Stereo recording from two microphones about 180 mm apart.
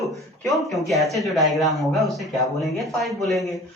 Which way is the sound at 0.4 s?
Centre (ahead or behind).